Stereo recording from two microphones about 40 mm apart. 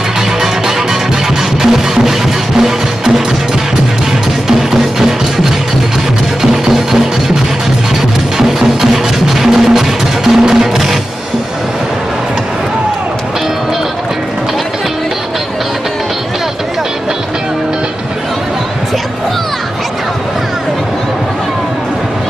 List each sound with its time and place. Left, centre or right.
1.6 s music: centre
4.5 s music: centre
8.4 s music: centre